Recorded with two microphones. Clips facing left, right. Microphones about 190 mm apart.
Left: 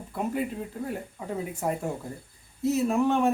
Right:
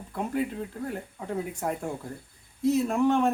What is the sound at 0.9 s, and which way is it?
Speech, 5° left (ahead or behind).